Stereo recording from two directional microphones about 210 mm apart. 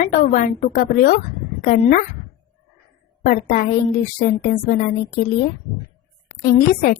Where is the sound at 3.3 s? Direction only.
40° left (ahead or behind).